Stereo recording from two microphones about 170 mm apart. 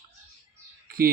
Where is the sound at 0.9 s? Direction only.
60° right (ahead or behind).